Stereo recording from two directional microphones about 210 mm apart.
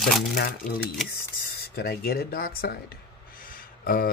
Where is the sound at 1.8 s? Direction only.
45° left (ahead or behind).